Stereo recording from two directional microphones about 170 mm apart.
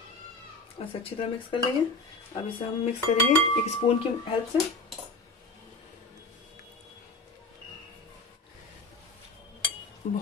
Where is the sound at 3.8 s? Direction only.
30° left (ahead or behind).